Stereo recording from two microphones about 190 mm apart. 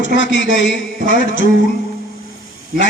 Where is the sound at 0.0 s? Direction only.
75° left (ahead or behind).